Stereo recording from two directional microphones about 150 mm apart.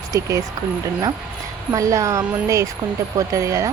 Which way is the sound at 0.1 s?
20° right (ahead or behind).